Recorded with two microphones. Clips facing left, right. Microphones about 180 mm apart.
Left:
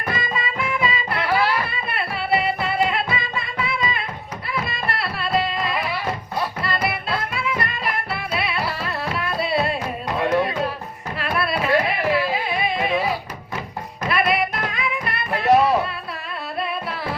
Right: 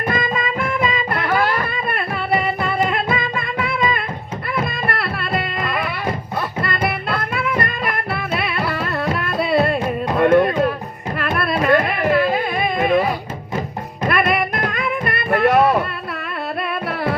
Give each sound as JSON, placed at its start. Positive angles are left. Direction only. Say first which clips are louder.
{"t": 0.1, "sound": "music", "louder": "right 3 dB", "side_deg": -50}